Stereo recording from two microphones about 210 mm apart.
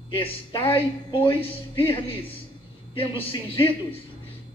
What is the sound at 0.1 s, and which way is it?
A woman's voice, 25° left (ahead or behind).